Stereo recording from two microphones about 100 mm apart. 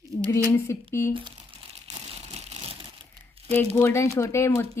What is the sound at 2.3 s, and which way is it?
Vehicle, 90° right.